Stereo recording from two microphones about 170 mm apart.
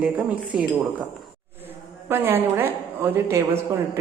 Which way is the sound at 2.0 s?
15° right (ahead or behind).